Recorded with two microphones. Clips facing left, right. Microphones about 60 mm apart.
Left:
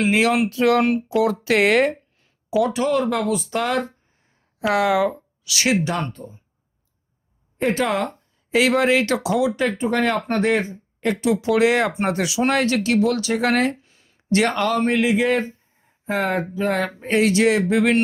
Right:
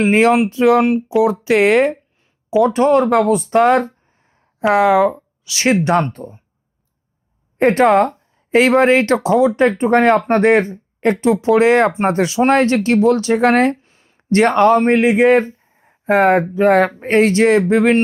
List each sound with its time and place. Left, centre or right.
0.0 s speech: right
0.5 s speech: right
2.7 s speech: right
4.6 s speech: right
5.7 s speech: right
7.6 s speech: right